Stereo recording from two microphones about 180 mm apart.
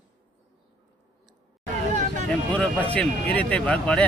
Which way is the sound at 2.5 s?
5° left (ahead or behind).